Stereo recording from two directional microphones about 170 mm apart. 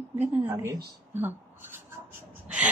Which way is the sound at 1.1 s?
10° right (ahead or behind).